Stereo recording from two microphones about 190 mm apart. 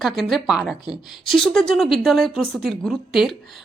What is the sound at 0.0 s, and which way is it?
Speech, centre (ahead or behind).